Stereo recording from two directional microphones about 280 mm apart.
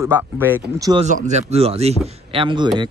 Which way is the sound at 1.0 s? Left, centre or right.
Right.